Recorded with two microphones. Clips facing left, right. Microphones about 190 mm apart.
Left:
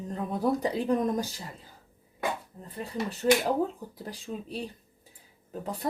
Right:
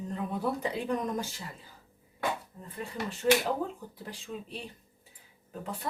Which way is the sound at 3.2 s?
35° left (ahead or behind).